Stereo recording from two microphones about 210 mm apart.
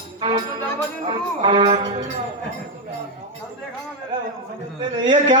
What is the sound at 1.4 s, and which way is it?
Music, 20° right (ahead or behind).